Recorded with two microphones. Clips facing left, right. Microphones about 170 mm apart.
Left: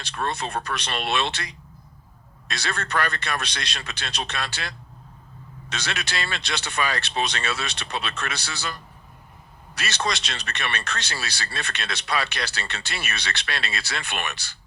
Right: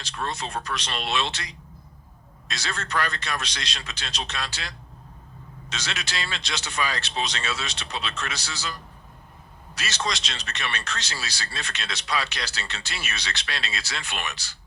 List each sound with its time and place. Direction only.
0.0 s speech: 60° left (ahead or behind)